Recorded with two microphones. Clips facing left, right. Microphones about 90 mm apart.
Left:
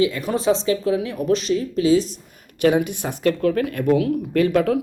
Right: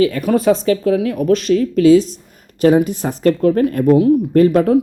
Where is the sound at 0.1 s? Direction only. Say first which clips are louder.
Right 6 dB; 50° right (ahead or behind).